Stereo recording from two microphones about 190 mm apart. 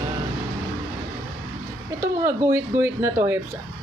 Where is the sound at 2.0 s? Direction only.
15° right (ahead or behind).